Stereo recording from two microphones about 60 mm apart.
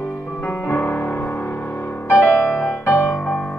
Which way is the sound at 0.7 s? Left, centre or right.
Left.